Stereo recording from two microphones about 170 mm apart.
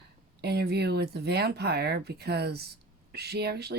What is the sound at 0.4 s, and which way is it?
Speech, 70° right (ahead or behind).